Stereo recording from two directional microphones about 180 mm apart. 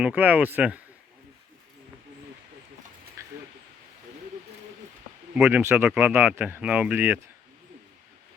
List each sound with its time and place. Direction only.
0.0 s speech: 10° right (ahead or behind)
3.2 s a sound: 15° right (ahead or behind)
5.3 s speech: 5° right (ahead or behind)